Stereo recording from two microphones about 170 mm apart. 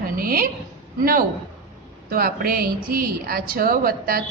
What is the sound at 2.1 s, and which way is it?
Speech, 60° right (ahead or behind).